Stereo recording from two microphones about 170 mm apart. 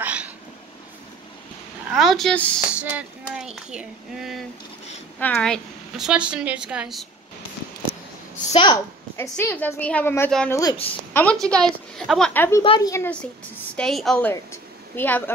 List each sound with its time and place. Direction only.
0.0 s a sound: 10° right (ahead or behind)
1.9 s speech: centre (ahead or behind)
2.7 s speech: 10° right (ahead or behind)
8.5 s speech: 30° left (ahead or behind)
9.1 s a woman's voice: 15° left (ahead or behind)
10.5 s speech: 20° left (ahead or behind)
11.1 s a woman's voice: 5° left (ahead or behind)
12.6 s speech: 30° left (ahead or behind)
12.9 s a woman's voice: 15° left (ahead or behind)
13.7 s speech: centre (ahead or behind)
14.3 s a woman's voice: 15° left (ahead or behind)